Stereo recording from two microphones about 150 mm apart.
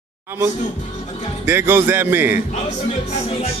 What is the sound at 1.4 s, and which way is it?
A man's voice, 15° right (ahead or behind).